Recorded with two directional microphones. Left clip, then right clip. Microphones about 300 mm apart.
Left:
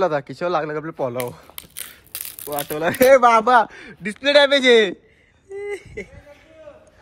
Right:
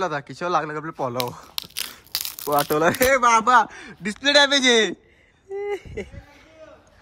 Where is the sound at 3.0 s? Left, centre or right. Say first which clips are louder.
Left 7 dB; centre.